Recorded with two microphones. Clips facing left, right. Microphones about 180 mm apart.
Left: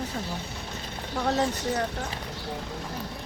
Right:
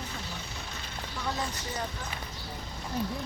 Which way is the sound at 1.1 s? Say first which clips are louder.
Left 9 dB; 70° left (ahead or behind).